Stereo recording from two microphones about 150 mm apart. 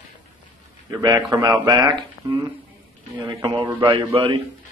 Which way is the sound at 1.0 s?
25° right (ahead or behind).